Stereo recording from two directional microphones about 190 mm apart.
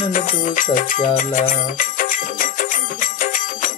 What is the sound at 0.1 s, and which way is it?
Music, 45° left (ahead or behind).